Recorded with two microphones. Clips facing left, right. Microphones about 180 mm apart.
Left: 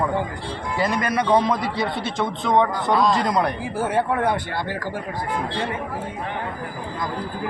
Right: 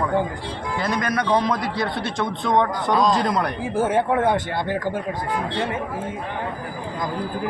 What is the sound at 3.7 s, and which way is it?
Speech, 20° right (ahead or behind).